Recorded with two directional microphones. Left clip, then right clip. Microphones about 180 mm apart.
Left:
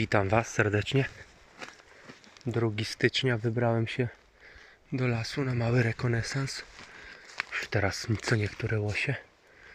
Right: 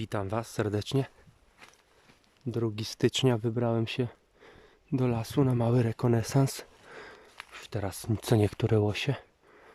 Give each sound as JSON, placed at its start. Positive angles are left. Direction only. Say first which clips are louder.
{"t": 0.0, "sound": "speech", "louder": "left 7 dB", "side_deg": -15}
{"t": 2.5, "sound": "speech", "louder": "left 2 dB", "side_deg": -30}
{"t": 7.5, "sound": "speech", "louder": "left 7 dB", "side_deg": -25}